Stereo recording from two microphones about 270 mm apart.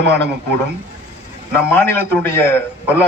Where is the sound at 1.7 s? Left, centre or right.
Centre.